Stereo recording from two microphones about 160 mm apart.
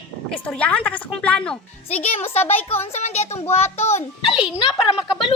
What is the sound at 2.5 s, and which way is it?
A child's voice, 40° left (ahead or behind).